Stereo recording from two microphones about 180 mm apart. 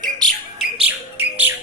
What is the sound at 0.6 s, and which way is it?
Bird, 10° right (ahead or behind).